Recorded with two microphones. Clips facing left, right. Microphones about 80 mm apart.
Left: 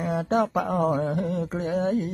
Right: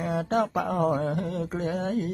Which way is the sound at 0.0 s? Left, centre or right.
Centre.